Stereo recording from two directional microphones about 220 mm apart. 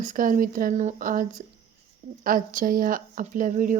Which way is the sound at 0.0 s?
35° right (ahead or behind).